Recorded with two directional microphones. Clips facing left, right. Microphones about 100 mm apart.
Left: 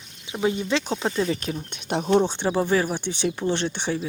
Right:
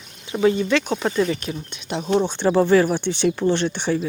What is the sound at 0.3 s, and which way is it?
Speech, 15° left (ahead or behind).